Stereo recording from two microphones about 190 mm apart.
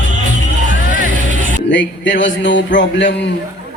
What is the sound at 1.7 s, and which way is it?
A man's voice, 70° left (ahead or behind).